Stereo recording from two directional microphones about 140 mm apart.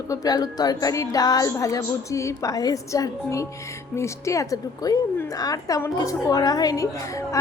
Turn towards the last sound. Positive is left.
turn(degrees=25)  # may be behind; listen again after turning